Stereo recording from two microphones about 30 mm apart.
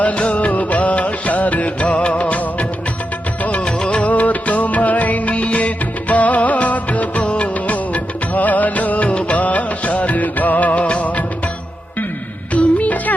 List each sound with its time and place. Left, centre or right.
0.0 s music: left
2.0 s music: left
2.2 s music: left
3.6 s music: left
4.0 s music: left
7.3 s music of bollywood: left
9.4 s music: left
12.5 s music: left